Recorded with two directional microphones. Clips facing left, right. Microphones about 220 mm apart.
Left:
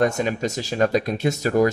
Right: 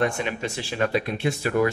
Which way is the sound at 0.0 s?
40° left (ahead or behind).